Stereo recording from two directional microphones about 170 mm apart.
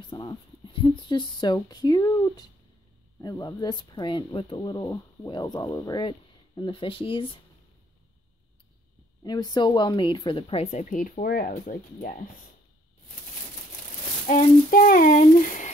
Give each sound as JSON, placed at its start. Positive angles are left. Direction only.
{"t": 0.1, "sound": "speech", "side_deg": 25}
{"t": 9.2, "sound": "a woman's voice", "side_deg": 25}
{"t": 14.2, "sound": "a sound", "side_deg": 50}